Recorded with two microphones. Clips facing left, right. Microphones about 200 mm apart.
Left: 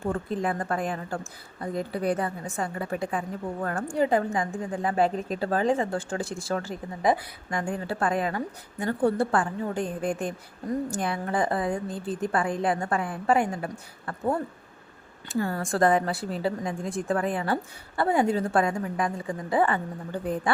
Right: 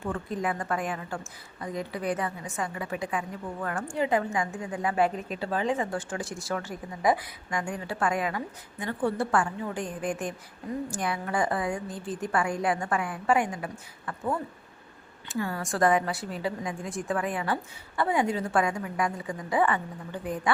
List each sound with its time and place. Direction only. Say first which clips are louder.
0.0 s a woman's voice: left 3 dB; 30° left (ahead or behind)
7.6 s a woman's voice: left 2 dB; 35° left (ahead or behind)
15.4 s a woman's voice: left 3 dB; 40° left (ahead or behind)